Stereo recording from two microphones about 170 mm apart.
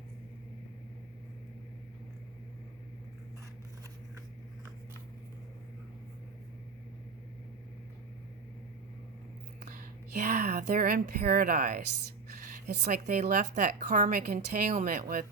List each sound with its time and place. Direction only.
9.6 s speech: 50° right (ahead or behind)
12.6 s speech: 75° right (ahead or behind)
13.4 s speech: 45° right (ahead or behind)